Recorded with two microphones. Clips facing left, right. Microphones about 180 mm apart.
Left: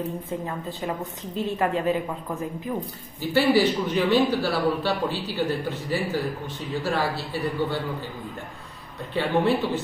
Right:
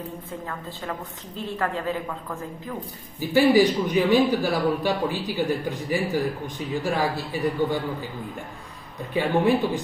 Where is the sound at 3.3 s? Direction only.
15° right (ahead or behind).